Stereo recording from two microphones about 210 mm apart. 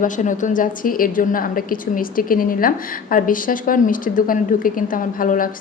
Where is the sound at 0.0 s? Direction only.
35° left (ahead or behind).